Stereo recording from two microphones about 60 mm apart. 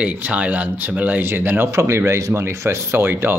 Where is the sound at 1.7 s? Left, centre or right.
Right.